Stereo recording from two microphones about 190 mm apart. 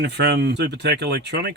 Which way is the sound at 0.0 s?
60° right (ahead or behind).